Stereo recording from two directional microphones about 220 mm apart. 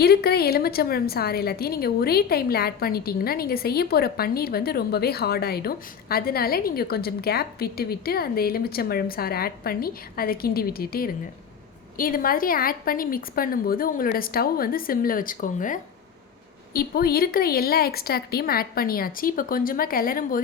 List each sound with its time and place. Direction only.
0.0 s a woman's voice: 45° left (ahead or behind)